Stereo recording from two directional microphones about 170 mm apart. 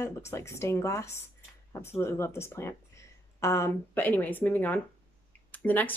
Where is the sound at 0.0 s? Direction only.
15° left (ahead or behind).